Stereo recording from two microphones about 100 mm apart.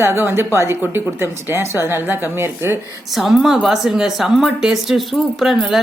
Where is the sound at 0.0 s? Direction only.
25° right (ahead or behind).